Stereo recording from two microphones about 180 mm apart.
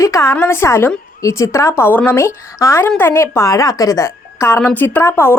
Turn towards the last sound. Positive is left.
turn(degrees=15)  # may be behind; listen again after turning